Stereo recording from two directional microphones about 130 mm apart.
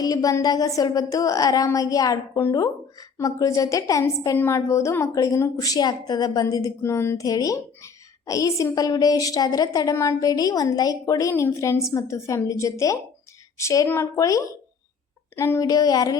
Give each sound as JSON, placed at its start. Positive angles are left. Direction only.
{"t": 0.0, "sound": "a woman's voice", "side_deg": 25}